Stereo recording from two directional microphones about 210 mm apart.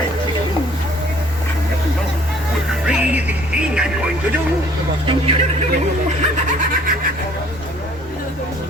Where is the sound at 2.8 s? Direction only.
5° right (ahead or behind).